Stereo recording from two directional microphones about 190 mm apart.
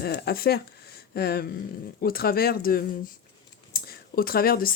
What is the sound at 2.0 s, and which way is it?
Speech, 50° left (ahead or behind).